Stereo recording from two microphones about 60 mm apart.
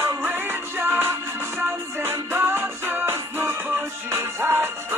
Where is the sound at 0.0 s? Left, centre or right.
Right.